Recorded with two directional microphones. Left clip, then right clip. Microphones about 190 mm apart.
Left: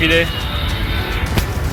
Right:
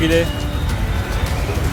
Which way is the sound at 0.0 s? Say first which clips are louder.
Left 2 dB; 20° right (ahead or behind).